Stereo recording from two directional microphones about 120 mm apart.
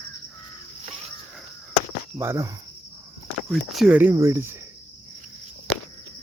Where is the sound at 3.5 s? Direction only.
Centre (ahead or behind).